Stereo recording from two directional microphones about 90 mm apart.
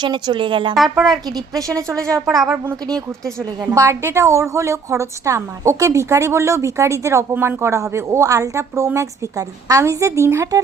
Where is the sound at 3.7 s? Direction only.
35° right (ahead or behind).